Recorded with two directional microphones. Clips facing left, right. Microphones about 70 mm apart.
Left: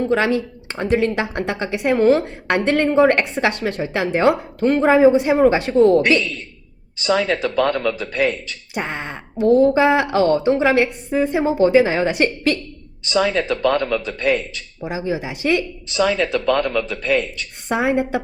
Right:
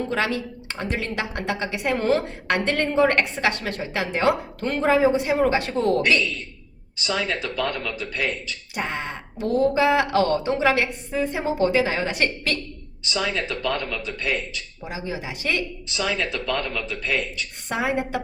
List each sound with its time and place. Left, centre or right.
0.7 s a woman's voice: left
7.0 s speech: left
8.7 s a woman's voice: left
13.1 s speech: left
14.8 s a woman's voice: left
16.0 s speech: left
17.7 s a woman's voice: left